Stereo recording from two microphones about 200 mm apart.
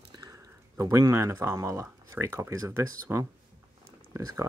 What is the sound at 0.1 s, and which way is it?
Speech, 20° right (ahead or behind).